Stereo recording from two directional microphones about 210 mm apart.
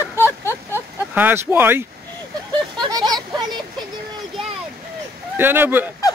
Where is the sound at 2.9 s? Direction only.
20° right (ahead or behind).